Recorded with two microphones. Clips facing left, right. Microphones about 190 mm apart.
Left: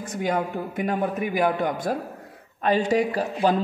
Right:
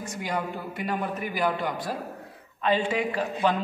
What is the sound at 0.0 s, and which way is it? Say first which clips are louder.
A man's voice: left 5 dB; 55° left (ahead or behind).